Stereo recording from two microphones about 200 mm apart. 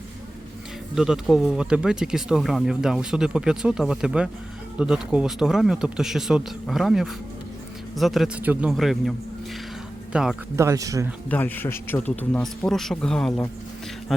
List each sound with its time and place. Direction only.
0.9 s speech: centre (ahead or behind)
10.7 s a man's voice: 15° right (ahead or behind)
11.3 s speech: 10° left (ahead or behind)